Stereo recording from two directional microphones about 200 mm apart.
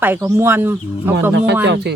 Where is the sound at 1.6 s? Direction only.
60° right (ahead or behind).